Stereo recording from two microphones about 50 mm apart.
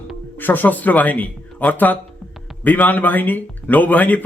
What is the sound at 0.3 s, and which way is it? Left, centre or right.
A man's voice, left.